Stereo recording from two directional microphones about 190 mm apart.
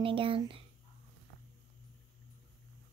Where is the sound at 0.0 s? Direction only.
30° right (ahead or behind).